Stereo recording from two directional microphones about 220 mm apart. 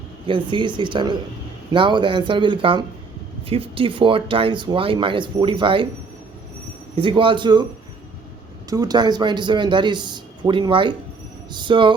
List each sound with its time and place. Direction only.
0.3 s speech: 20° right (ahead or behind)
6.9 s speech: 25° right (ahead or behind)
8.7 s speech: 15° right (ahead or behind)